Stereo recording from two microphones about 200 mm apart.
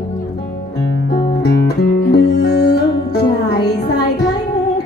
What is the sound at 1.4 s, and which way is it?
Music, 55° left (ahead or behind).